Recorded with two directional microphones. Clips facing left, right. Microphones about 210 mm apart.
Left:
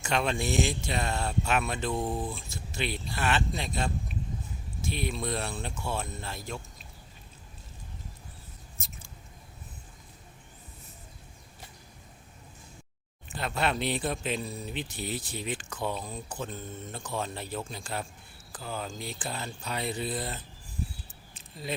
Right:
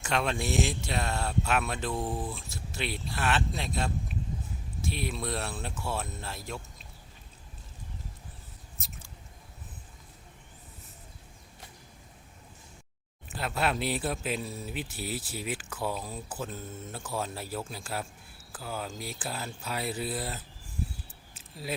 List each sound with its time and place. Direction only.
0.0 s speech: centre (ahead or behind)
13.3 s speech: 5° right (ahead or behind)
21.3 s keys jangling: 5° right (ahead or behind)